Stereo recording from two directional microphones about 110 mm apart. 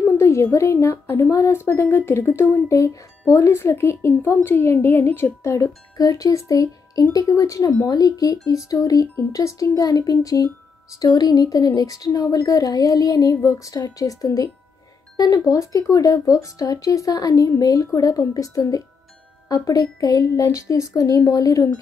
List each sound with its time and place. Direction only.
0.0 s speech: 25° left (ahead or behind)